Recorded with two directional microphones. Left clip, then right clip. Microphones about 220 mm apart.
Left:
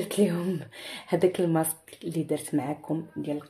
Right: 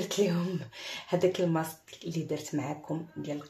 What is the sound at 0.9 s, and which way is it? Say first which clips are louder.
Speech: left 3 dB; 40° left (ahead or behind).